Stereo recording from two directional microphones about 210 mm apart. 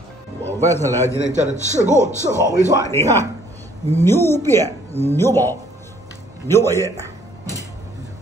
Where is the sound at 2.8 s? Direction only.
10° left (ahead or behind).